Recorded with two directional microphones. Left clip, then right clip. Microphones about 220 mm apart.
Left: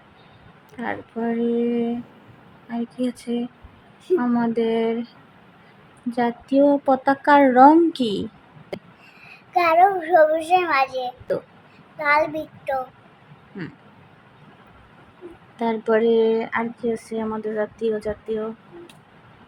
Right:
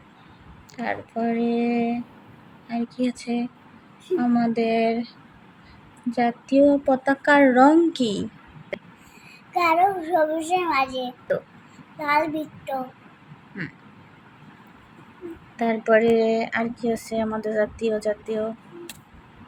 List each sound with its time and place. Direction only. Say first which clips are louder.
0.8 s speech: right 1 dB; 15° left (ahead or behind)
2.6 s female singing: even; 20° left (ahead or behind)
6.1 s speech: even; 20° left (ahead or behind)
9.5 s female singing: left 3 dB; 20° left (ahead or behind)
11.9 s female singing: left 3 dB; 20° left (ahead or behind)
15.5 s speech: right 1 dB; 15° left (ahead or behind)